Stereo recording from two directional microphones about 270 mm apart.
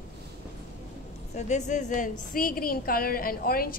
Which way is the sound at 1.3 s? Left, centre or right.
Left.